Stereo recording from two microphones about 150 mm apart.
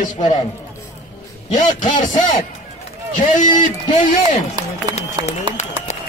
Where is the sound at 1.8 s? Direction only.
55° left (ahead or behind).